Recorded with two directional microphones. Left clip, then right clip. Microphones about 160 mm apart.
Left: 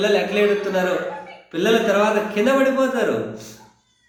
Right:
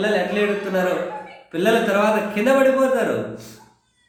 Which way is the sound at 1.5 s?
5° right (ahead or behind).